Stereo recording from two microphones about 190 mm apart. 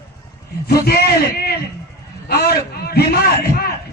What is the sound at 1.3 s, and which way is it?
A man's voice, 55° left (ahead or behind).